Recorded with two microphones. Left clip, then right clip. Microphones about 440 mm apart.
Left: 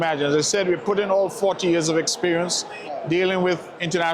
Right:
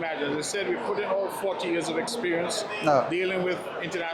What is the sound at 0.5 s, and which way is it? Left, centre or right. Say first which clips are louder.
A man's voice: left 7 dB; left.